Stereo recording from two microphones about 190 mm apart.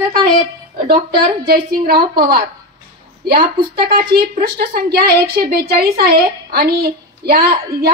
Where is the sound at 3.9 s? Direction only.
55° right (ahead or behind).